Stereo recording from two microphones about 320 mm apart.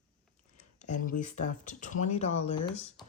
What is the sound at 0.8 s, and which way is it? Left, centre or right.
Speech, left.